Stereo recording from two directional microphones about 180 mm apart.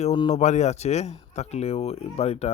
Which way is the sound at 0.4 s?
40° left (ahead or behind).